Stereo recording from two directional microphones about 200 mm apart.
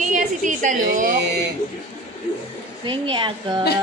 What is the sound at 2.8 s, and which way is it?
Speech, 25° right (ahead or behind).